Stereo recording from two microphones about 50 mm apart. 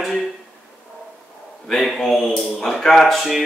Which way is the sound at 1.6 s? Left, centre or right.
Centre.